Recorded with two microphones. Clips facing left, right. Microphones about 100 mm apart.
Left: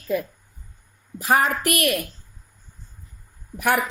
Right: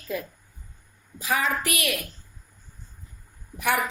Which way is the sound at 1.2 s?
55° left (ahead or behind).